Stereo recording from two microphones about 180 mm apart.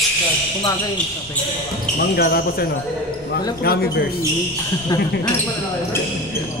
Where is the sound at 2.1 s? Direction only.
55° left (ahead or behind).